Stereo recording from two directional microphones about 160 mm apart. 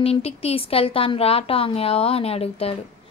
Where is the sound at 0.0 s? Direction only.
40° left (ahead or behind).